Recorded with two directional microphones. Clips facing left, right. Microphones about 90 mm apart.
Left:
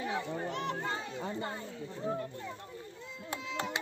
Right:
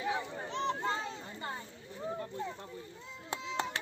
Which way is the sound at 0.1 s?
25° right (ahead or behind).